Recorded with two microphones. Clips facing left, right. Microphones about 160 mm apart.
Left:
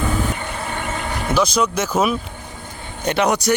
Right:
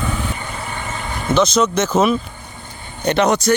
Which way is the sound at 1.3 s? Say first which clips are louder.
Right 3 dB; 10° left (ahead or behind).